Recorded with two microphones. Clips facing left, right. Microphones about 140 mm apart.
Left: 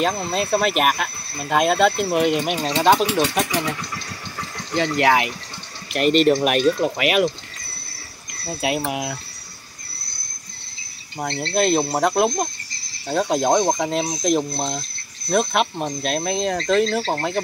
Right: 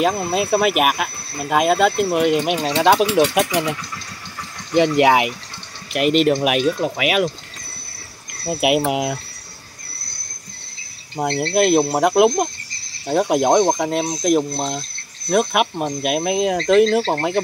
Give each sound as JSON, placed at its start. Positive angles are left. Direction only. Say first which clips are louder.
{"t": 0.0, "sound": "speech", "louder": "right 3 dB", "side_deg": -10}
{"t": 4.7, "sound": "speech", "louder": "right 4 dB", "side_deg": -20}
{"t": 5.9, "sound": "speech", "louder": "even", "side_deg": -5}
{"t": 8.5, "sound": "speech", "louder": "right 6 dB", "side_deg": -15}
{"t": 11.1, "sound": "speech", "louder": "right 4 dB", "side_deg": -15}
{"t": 13.7, "sound": "speech", "louder": "right 2 dB", "side_deg": -5}
{"t": 15.3, "sound": "speech", "louder": "right 2 dB", "side_deg": -10}